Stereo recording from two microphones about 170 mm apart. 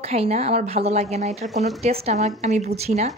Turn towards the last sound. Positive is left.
turn(degrees=-40)  # may be behind; listen again after turning